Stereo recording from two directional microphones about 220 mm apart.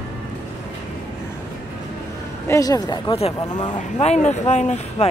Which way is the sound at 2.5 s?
15° left (ahead or behind).